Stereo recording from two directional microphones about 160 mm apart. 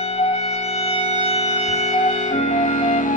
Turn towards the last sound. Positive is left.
turn(degrees=55)  # may be behind; listen again after turning